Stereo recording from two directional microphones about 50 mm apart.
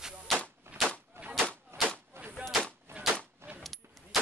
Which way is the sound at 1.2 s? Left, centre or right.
Right.